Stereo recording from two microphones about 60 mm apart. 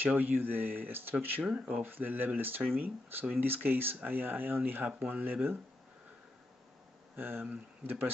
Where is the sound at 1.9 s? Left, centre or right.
Right.